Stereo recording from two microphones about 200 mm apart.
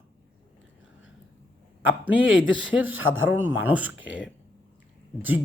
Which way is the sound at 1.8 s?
10° right (ahead or behind).